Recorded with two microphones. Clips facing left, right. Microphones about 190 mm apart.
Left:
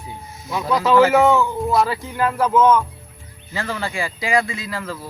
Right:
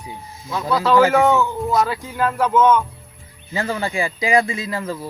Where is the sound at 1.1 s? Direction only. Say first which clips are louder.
Left 1 dB; centre (ahead or behind).